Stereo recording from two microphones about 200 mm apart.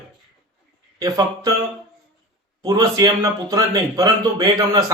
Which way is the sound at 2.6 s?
15° right (ahead or behind).